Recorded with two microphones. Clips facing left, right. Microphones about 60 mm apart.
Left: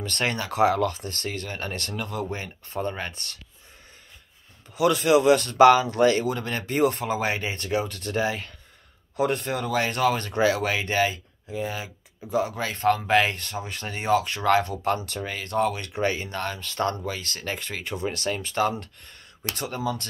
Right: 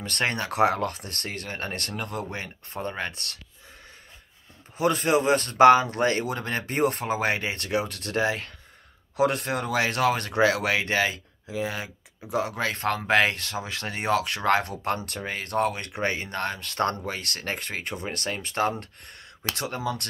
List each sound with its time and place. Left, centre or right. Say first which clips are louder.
0.1 s speech: right 1 dB; right
3.1 s speech: right 1 dB; right
4.7 s speech: left 3 dB; right
11.4 s speech: even; right
14.4 s speech: left 2 dB; right
19.5 s speech: left 1 dB; right